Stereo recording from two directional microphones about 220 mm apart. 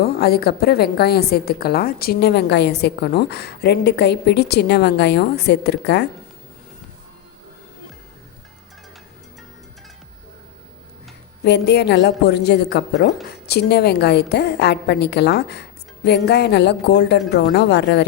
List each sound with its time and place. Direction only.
0.0 s a woman's voice: 45° left (ahead or behind)
11.4 s a woman's voice: 50° left (ahead or behind)